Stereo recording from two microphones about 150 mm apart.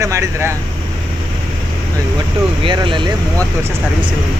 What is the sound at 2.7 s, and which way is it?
Speech, 35° right (ahead or behind).